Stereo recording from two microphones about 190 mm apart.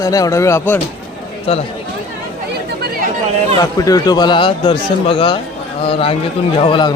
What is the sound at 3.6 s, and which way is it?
A man's voice, 20° left (ahead or behind).